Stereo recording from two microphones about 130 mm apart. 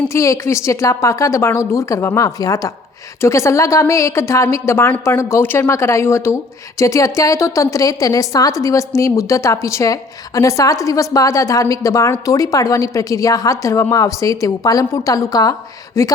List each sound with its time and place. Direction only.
0.1 s a woman's voice: 25° left (ahead or behind)